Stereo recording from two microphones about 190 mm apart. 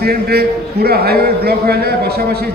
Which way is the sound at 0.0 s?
55° right (ahead or behind).